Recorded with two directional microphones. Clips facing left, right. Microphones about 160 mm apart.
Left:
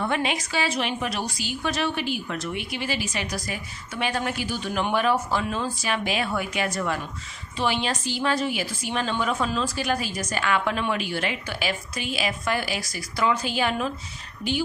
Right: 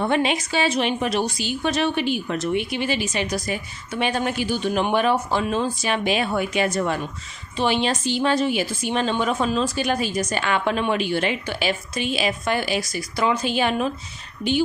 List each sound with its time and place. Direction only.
0.0 s a woman's voice: 25° right (ahead or behind)